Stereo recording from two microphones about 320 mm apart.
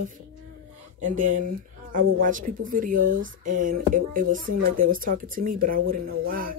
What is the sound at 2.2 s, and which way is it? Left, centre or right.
Speech, right.